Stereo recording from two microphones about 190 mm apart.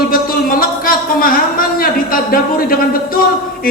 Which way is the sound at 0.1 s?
50° left (ahead or behind).